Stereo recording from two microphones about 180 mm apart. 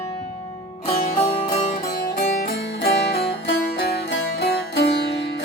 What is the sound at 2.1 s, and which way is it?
Music, 60° left (ahead or behind).